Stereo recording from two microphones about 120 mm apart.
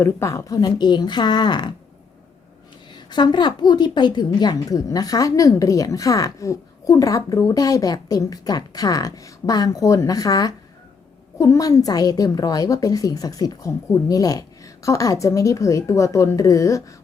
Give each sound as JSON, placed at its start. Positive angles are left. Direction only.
{"t": 0.0, "sound": "a woman's voice", "side_deg": 25}
{"t": 2.9, "sound": "a woman's voice", "side_deg": 40}